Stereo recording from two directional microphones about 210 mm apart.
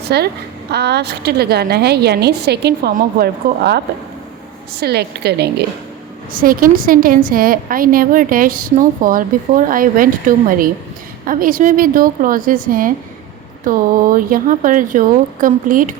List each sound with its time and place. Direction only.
0.0 s a woman's voice: 50° right (ahead or behind)